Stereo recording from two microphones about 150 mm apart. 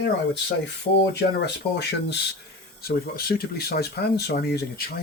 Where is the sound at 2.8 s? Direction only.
90° left.